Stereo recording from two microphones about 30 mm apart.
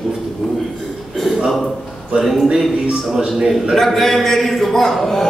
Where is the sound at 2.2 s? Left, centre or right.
Centre.